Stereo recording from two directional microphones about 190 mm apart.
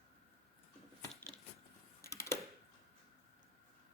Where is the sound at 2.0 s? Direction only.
15° left (ahead or behind).